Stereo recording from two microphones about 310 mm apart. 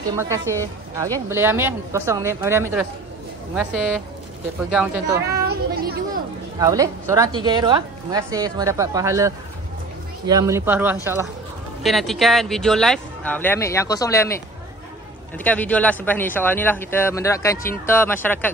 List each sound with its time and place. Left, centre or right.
0.1 s a woman's voice: centre
5.3 s a sound: right
6.6 s a woman's voice: centre